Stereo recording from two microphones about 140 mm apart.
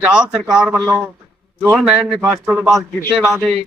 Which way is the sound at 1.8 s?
5° right (ahead or behind).